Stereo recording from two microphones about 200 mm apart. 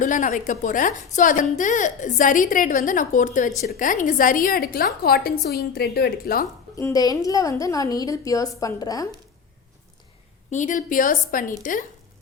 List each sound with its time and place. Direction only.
0.0 s a woman's voice: 40° left (ahead or behind)
6.7 s a woman's voice: 15° left (ahead or behind)
10.5 s a woman's voice: 40° left (ahead or behind)